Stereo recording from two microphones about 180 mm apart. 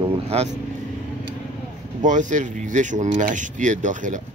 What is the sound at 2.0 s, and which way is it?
A man's voice, 45° right (ahead or behind).